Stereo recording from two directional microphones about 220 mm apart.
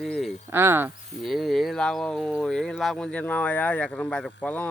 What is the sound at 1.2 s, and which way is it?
Speech, centre (ahead or behind).